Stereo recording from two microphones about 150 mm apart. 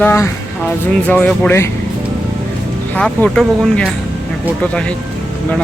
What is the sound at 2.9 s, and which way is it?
Speech, 5° left (ahead or behind).